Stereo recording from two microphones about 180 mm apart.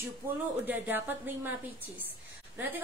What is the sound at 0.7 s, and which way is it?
Speech, 10° right (ahead or behind).